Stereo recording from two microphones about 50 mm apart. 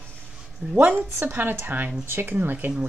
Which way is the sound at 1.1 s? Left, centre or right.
Right.